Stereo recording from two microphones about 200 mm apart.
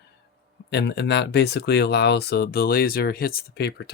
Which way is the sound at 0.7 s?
60° left (ahead or behind).